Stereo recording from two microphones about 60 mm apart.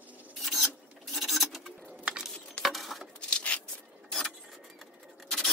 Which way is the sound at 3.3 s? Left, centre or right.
Left.